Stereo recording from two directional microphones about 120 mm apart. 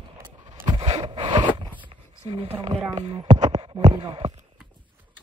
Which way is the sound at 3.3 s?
80° right.